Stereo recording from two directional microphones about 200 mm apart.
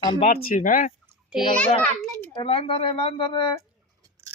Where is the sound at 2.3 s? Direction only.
25° left (ahead or behind).